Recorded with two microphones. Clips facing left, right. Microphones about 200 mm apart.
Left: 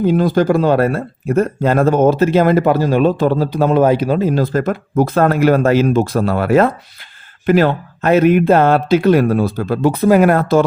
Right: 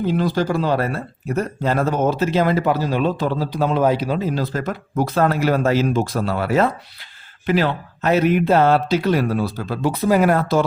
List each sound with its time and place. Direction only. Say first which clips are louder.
0.0 s speech: left 6 dB; 50° left (ahead or behind)